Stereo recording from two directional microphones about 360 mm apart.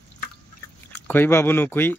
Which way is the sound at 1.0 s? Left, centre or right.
Centre.